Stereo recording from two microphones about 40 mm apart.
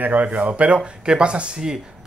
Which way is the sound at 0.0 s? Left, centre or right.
Right.